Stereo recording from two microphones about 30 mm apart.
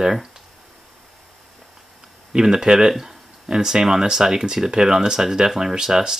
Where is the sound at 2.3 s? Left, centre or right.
Right.